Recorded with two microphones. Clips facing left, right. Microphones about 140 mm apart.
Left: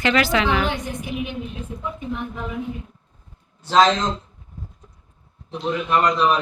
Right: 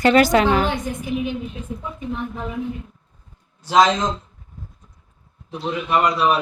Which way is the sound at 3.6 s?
10° right (ahead or behind).